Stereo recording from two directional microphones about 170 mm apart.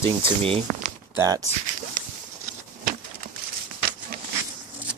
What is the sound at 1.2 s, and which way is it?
Speech, 20° right (ahead or behind).